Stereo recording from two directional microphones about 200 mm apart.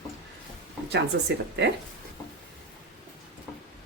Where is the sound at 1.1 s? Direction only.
60° right (ahead or behind).